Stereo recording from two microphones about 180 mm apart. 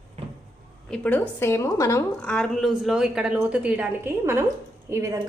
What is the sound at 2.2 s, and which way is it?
A woman's voice, 5° left (ahead or behind).